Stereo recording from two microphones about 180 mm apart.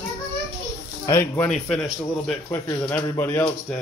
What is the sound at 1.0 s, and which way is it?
Speech, 15° left (ahead or behind).